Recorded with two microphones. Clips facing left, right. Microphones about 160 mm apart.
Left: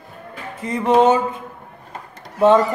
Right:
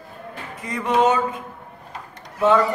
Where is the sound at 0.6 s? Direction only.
30° left (ahead or behind).